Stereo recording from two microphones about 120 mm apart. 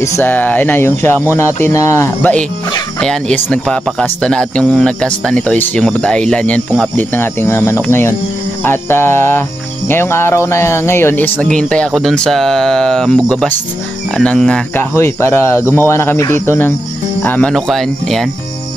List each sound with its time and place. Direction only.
0.0 s speech: 20° left (ahead or behind)
3.0 s speech: 5° left (ahead or behind)
14.8 s speech: 20° left (ahead or behind)
17.5 s speech: centre (ahead or behind)